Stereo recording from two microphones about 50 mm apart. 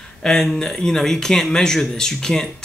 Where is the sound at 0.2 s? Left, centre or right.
Centre.